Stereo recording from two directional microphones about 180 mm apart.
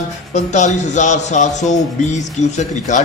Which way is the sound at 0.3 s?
40° left (ahead or behind).